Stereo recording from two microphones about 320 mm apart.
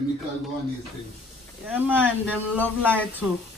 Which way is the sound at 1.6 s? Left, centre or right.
Centre.